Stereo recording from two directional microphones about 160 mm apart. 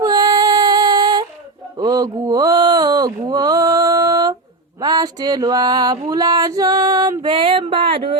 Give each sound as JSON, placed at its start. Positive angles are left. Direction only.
{"t": 0.0, "sound": "music", "side_deg": -25}
{"t": 1.8, "sound": "mantra", "side_deg": -25}
{"t": 4.8, "sound": "music", "side_deg": -25}